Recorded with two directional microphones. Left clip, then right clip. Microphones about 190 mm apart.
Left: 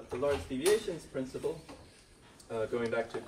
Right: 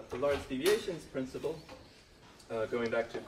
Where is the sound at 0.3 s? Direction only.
5° left (ahead or behind).